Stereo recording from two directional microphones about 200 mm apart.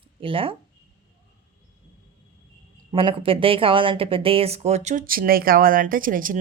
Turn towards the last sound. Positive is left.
turn(degrees=-45)  # may be behind; listen again after turning